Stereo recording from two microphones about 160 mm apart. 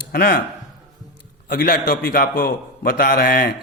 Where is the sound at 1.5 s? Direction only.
65° left (ahead or behind).